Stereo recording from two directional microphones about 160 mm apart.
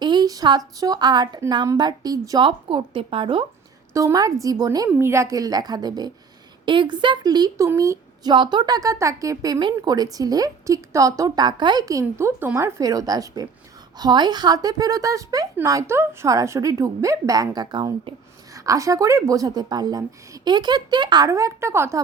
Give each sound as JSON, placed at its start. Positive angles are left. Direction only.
{"t": 0.0, "sound": "a woman's voice", "side_deg": -25}
{"t": 3.9, "sound": "a woman's voice", "side_deg": -20}